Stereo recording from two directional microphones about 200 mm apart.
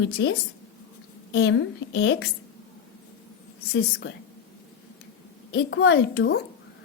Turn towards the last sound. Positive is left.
turn(degrees=60)  # may be behind; listen again after turning